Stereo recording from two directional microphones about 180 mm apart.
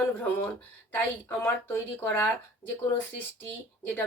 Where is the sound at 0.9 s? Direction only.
10° left (ahead or behind).